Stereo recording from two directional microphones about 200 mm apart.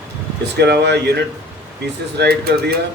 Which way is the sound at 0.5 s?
55° right (ahead or behind).